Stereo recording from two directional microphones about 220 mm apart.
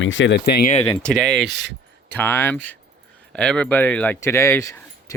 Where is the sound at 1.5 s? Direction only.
55° right (ahead or behind).